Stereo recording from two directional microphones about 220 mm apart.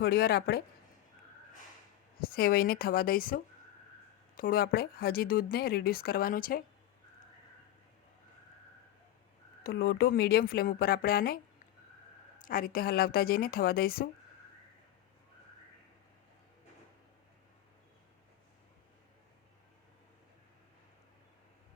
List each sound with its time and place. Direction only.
0.0 s speech: 45° left (ahead or behind)
2.1 s speech: 45° left (ahead or behind)
9.6 s speech: 45° left (ahead or behind)
12.5 s speech: 40° left (ahead or behind)